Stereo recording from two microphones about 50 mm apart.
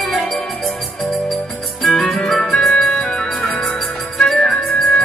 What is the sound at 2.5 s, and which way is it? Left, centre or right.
Music, left.